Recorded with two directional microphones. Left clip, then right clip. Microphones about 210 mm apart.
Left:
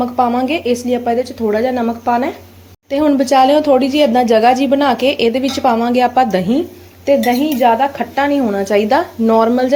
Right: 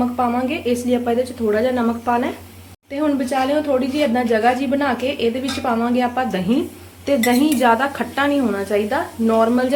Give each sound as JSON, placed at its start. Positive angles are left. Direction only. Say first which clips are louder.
{"t": 0.2, "sound": "speech", "louder": "left 9 dB", "side_deg": 30}
{"t": 7.0, "sound": "speech", "louder": "left 4 dB", "side_deg": 10}